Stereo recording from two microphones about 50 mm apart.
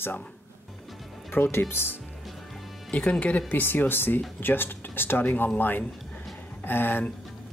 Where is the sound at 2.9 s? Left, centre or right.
Left.